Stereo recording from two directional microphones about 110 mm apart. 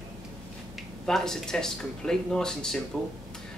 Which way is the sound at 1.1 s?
5° left (ahead or behind).